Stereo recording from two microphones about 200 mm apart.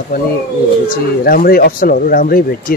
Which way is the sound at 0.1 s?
50° left (ahead or behind).